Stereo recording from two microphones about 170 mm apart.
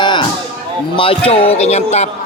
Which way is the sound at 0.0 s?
25° left (ahead or behind).